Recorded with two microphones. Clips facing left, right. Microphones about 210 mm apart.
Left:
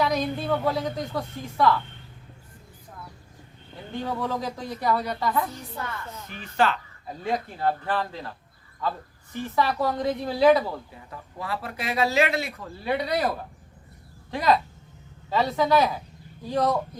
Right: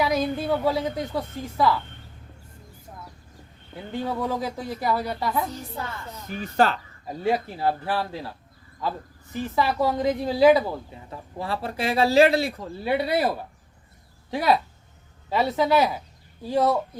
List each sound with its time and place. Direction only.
0.0 s speech: 5° right (ahead or behind)
4.2 s speech: 10° right (ahead or behind)
5.4 s speech: 25° right (ahead or behind)
6.2 s speech: 40° right (ahead or behind)
7.3 s speech: 10° right (ahead or behind)
11.1 s speech: 30° right (ahead or behind)
12.9 s speech: 5° right (ahead or behind)
14.3 s speech: 10° right (ahead or behind)